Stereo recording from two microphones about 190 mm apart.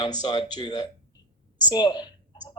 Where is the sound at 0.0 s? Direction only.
20° left (ahead or behind).